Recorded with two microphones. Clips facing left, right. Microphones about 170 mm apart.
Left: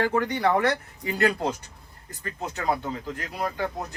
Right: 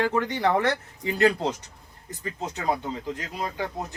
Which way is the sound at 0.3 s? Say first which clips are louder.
Left 1 dB; 25° right (ahead or behind).